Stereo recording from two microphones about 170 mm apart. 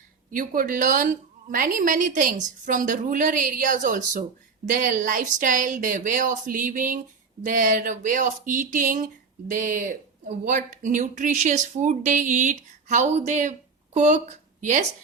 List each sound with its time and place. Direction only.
0.3 s speech: 50° right (ahead or behind)